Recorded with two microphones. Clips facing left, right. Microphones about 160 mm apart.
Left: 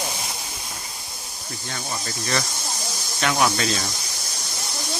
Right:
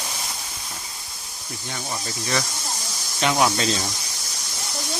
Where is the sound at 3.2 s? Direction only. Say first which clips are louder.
Right 1 dB; 20° right (ahead or behind).